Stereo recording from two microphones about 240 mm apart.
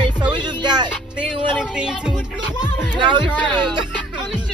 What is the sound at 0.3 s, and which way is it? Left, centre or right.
Music, centre.